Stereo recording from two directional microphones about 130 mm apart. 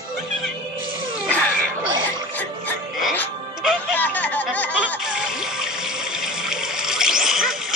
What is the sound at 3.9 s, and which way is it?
Music, 10° left (ahead or behind).